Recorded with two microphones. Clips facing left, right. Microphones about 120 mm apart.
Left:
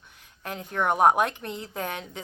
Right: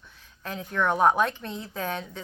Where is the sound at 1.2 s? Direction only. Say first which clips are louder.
Even; 60° left (ahead or behind).